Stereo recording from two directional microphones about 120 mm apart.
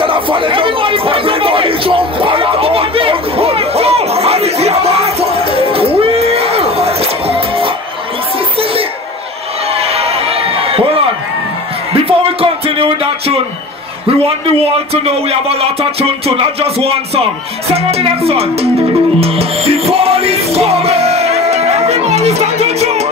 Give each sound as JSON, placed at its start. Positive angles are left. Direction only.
{"t": 0.0, "sound": "chatter", "side_deg": -45}
{"t": 9.8, "sound": "a sound", "side_deg": -55}
{"t": 11.9, "sound": "music", "side_deg": -55}
{"t": 15.0, "sound": "music", "side_deg": -55}